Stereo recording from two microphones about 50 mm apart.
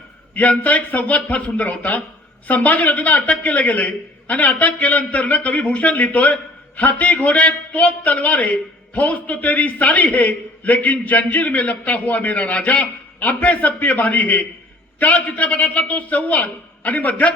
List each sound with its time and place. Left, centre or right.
0.6 s a man's voice: left